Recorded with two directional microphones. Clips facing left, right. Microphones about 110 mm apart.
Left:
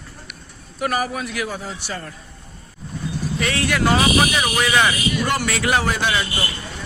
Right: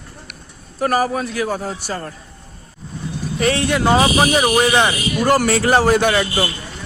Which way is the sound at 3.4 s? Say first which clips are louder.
Right 4 dB; 30° right (ahead or behind).